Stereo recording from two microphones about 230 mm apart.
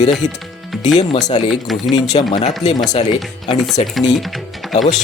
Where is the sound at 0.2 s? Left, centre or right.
Centre.